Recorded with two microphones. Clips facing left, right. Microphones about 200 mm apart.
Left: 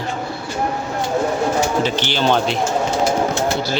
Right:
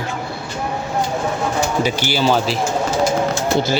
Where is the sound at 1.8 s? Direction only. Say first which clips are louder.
Right 1 dB; 10° right (ahead or behind).